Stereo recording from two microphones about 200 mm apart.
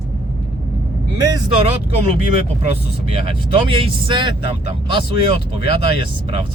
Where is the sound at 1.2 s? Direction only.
20° right (ahead or behind).